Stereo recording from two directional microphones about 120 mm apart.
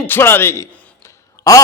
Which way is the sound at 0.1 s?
20° left (ahead or behind).